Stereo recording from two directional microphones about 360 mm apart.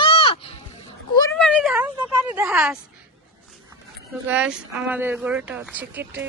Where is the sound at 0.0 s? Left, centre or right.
Centre.